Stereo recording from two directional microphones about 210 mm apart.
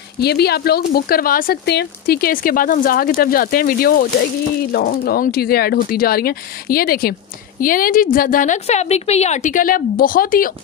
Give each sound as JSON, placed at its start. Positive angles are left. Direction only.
{"t": 0.2, "sound": "a woman's voice", "side_deg": 50}